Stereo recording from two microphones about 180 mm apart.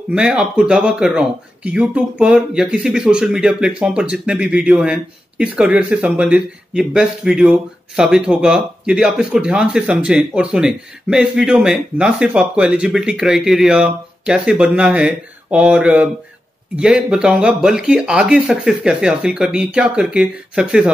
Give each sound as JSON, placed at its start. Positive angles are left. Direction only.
{"t": 0.1, "sound": "speech", "side_deg": -5}